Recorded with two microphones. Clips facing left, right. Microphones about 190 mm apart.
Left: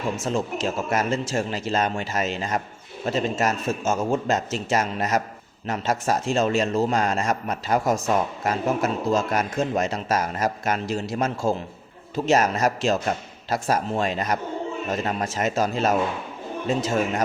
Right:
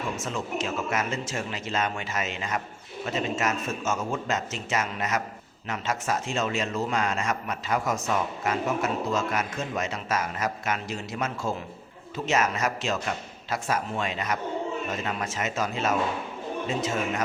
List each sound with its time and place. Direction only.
0.3 s a man's voice: 35° left (ahead or behind)